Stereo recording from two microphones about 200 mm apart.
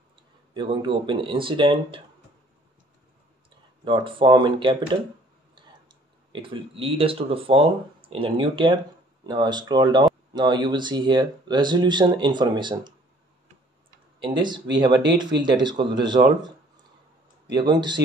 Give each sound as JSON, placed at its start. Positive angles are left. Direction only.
{"t": 0.6, "sound": "speech", "side_deg": -25}
{"t": 3.8, "sound": "speech", "side_deg": -25}
{"t": 14.2, "sound": "speech", "side_deg": -20}
{"t": 17.5, "sound": "speech", "side_deg": -20}